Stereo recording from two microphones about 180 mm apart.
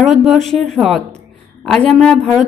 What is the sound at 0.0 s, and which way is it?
A woman's voice, centre (ahead or behind).